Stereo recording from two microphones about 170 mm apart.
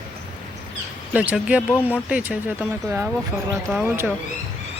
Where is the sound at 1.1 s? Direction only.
10° right (ahead or behind).